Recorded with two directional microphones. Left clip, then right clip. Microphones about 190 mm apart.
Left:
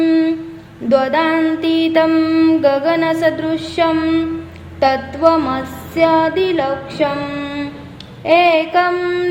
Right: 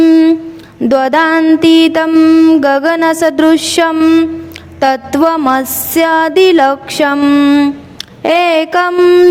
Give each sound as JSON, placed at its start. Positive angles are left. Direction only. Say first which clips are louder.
{"t": 0.0, "sound": "a sound", "louder": "right 7 dB", "side_deg": -40}
{"t": 0.9, "sound": "music", "louder": "right 4 dB", "side_deg": -55}
{"t": 4.8, "sound": "music", "louder": "right 3 dB", "side_deg": -55}
{"t": 8.2, "sound": "music", "louder": "right 2 dB", "side_deg": -55}